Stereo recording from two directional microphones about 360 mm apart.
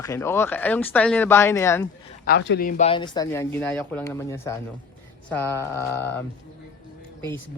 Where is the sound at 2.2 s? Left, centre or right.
Left; by 6.2 s centre.